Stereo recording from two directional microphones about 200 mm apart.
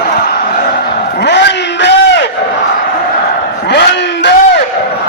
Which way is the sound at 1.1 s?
60° left (ahead or behind).